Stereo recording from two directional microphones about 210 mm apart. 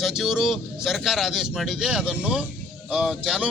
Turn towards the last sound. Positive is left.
turn(degrees=-5)  # may be behind; listen again after turning